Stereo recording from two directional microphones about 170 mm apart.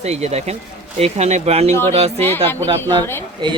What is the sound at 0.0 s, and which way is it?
Speech, 40° right (ahead or behind).